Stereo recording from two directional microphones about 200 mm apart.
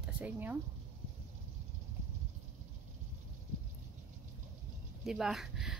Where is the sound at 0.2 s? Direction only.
10° right (ahead or behind).